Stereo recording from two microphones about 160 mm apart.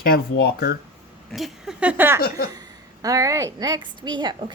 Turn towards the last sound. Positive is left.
turn(degrees=-30)  # may be behind; listen again after turning